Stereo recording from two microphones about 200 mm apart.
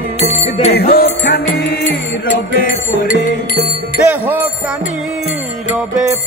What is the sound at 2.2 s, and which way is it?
Music, 40° left (ahead or behind).